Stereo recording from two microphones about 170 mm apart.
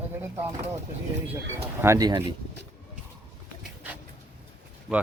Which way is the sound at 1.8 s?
20° right (ahead or behind).